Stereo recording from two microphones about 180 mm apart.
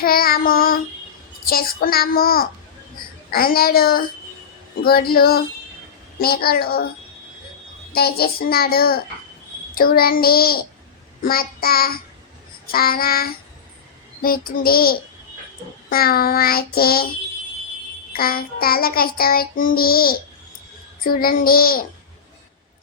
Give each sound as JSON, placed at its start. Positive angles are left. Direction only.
{"t": 0.0, "sound": "child singing", "side_deg": 55}
{"t": 7.9, "sound": "child singing", "side_deg": 60}
{"t": 18.1, "sound": "child singing", "side_deg": 55}